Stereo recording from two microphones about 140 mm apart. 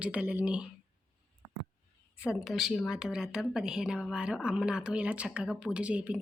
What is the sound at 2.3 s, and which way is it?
A woman's voice, 5° right (ahead or behind).